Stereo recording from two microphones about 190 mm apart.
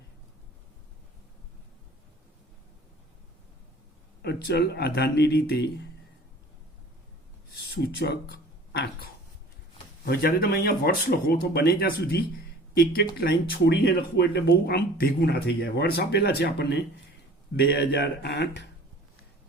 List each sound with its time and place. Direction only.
4.2 s speech: 60° left (ahead or behind)
7.5 s a sound: 60° left (ahead or behind)
10.1 s speech: 55° left (ahead or behind)